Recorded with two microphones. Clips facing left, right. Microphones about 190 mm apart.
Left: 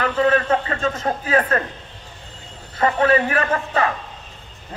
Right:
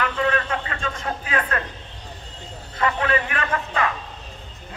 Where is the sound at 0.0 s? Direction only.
40° left (ahead or behind).